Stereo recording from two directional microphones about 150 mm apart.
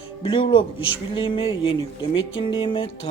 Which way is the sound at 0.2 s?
35° left (ahead or behind).